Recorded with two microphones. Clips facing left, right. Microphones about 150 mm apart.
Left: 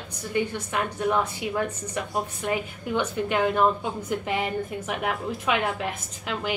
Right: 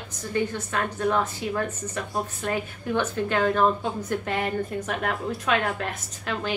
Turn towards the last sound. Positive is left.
turn(degrees=15)  # may be behind; listen again after turning